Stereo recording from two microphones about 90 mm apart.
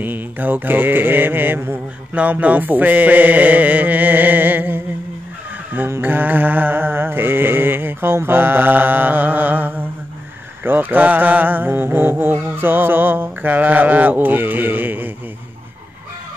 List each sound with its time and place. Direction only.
0.0 s mantra: 20° right (ahead or behind)